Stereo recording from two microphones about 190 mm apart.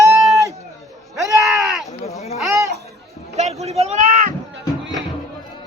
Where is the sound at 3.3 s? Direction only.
35° right (ahead or behind).